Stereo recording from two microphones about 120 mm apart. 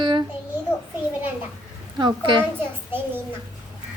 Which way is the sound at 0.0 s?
40° right (ahead or behind).